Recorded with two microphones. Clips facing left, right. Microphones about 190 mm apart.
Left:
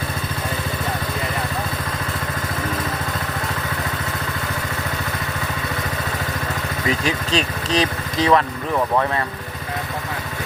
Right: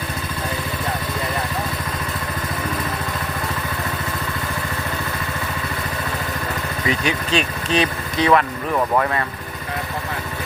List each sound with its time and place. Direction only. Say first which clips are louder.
6.8 s speech: even; centre (ahead or behind)